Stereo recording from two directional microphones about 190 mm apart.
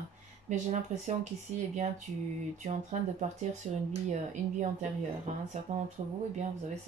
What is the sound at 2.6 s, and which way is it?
Speech, 35° right (ahead or behind).